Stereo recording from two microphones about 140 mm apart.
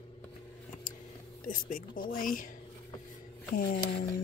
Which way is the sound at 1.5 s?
80° left.